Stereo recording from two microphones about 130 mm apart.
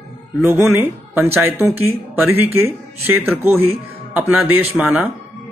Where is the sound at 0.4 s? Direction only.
15° right (ahead or behind).